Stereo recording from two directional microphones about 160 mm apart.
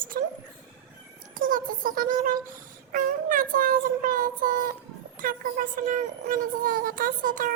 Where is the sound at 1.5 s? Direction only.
60° right (ahead or behind).